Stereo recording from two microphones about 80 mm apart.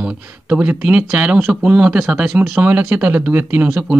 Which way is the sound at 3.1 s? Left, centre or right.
Right.